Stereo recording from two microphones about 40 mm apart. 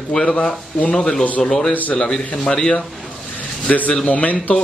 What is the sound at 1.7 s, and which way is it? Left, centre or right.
Speech, left.